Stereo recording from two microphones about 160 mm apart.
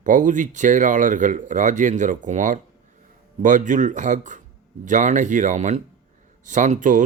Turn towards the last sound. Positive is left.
turn(degrees=-55)  # may be behind; listen again after turning